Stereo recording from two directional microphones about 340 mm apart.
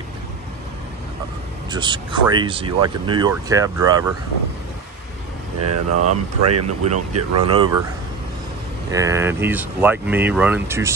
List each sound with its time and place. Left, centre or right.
1.7 s speech: centre
5.7 s speech: right
7.4 s speech: centre
8.9 s speech: centre